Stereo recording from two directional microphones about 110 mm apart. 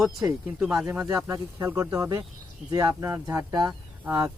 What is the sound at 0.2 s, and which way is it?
Speech, 25° right (ahead or behind).